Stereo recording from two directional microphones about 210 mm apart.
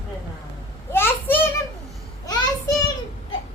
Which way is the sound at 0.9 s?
10° left (ahead or behind).